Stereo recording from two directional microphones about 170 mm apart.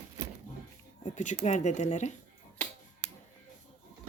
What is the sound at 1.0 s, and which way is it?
Speech, 45° left (ahead or behind).